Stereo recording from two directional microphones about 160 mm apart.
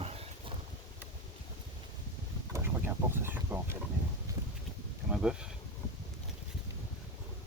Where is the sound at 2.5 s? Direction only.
15° right (ahead or behind).